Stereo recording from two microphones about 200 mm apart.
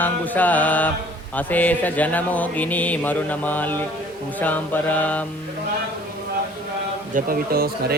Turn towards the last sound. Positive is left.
turn(degrees=-50)  # may be behind; listen again after turning